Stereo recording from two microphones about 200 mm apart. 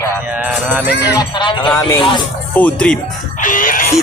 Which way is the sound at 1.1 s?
20° left (ahead or behind).